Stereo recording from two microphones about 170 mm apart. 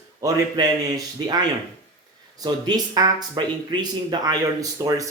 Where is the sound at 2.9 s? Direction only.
25° right (ahead or behind).